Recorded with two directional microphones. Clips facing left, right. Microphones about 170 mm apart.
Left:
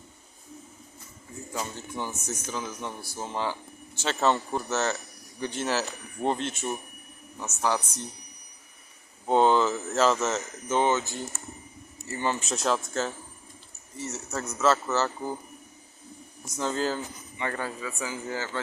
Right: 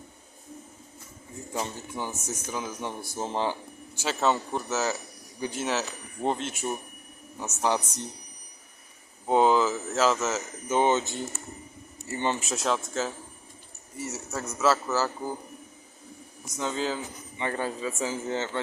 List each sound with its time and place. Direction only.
2.0 s speech: 10° right (ahead or behind)
4.0 s speech: 5° right (ahead or behind)
7.3 s speech: 20° right (ahead or behind)
9.2 s speech: 5° right (ahead or behind)
10.8 s speech: 20° right (ahead or behind)
12.5 s speech: centre (ahead or behind)
16.6 s speech: centre (ahead or behind)
17.3 s speech: 20° right (ahead or behind)